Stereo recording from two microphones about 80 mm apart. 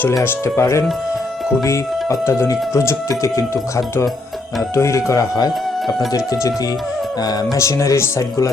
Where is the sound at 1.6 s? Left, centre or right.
Left.